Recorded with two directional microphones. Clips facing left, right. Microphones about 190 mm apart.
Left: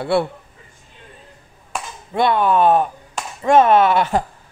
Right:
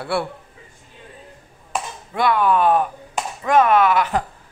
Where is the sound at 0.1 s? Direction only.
25° left (ahead or behind).